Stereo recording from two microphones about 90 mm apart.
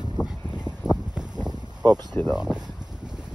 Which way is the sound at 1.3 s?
50° right (ahead or behind).